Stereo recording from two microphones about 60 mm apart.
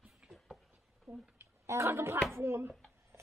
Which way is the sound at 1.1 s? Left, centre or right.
Right.